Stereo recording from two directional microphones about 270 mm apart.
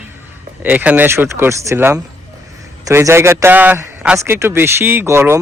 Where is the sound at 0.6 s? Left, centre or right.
Centre.